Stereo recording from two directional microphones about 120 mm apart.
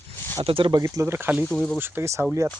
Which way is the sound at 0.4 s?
50° right (ahead or behind).